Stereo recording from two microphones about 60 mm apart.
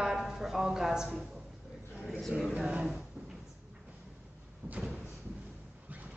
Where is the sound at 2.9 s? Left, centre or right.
Centre.